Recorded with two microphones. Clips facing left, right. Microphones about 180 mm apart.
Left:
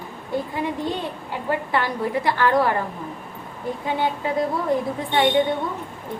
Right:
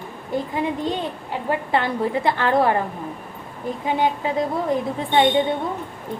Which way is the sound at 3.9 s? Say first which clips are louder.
Right 2 dB; 20° right (ahead or behind).